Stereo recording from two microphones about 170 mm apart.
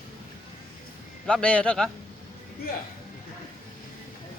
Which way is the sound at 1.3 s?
5° left (ahead or behind).